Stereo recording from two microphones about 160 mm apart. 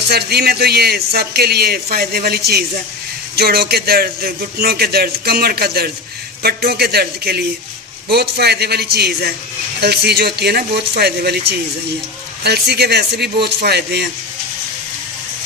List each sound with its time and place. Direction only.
0.1 s a man's voice: 80° right